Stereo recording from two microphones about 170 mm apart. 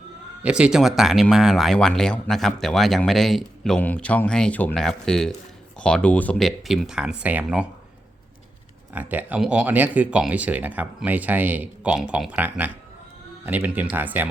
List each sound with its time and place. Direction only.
0.4 s speech: 5° right (ahead or behind)
8.9 s speech: 10° right (ahead or behind)